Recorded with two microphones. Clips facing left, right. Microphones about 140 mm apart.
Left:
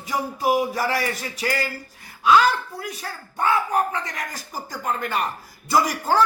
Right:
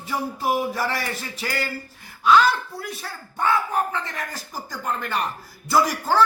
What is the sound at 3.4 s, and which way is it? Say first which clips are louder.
A man's voice: left 1 dB; 10° left (ahead or behind).